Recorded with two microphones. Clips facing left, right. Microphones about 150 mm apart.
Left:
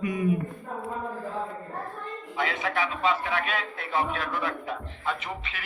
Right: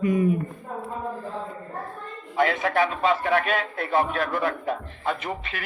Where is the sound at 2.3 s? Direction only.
50° right (ahead or behind).